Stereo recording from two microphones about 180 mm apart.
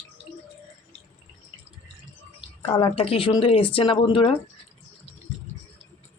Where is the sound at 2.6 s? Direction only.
30° left (ahead or behind).